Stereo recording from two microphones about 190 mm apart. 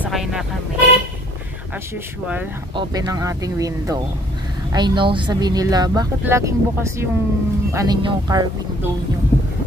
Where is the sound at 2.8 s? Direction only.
20° right (ahead or behind).